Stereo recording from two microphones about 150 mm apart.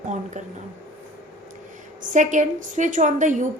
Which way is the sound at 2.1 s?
55° right (ahead or behind).